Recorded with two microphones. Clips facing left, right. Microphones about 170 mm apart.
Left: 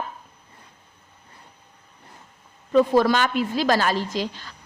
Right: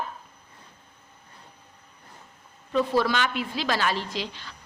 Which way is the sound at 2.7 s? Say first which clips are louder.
Left 6 dB; 45° left (ahead or behind).